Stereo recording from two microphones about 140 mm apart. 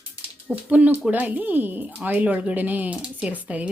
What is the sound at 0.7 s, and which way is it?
Speech, 10° right (ahead or behind).